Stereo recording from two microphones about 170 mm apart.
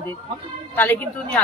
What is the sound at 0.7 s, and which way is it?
Speech, 10° left (ahead or behind).